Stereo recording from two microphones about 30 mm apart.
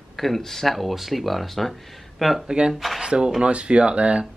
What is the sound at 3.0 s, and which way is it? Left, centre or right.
Speech, right.